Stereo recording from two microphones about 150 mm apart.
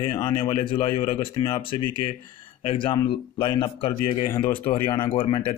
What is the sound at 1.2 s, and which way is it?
Speech, 35° left (ahead or behind).